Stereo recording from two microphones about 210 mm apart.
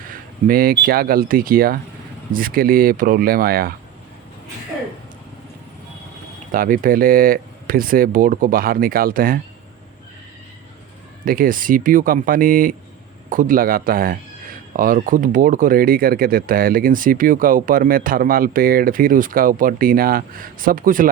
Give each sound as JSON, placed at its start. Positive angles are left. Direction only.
{"t": 0.1, "sound": "speech", "side_deg": -45}
{"t": 6.5, "sound": "speech", "side_deg": -40}
{"t": 11.3, "sound": "speech", "side_deg": -40}